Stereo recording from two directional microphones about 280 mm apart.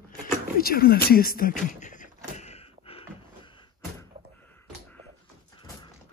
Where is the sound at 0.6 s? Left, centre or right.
Left.